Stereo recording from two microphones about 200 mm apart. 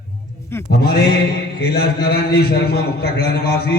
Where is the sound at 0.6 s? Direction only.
55° left (ahead or behind).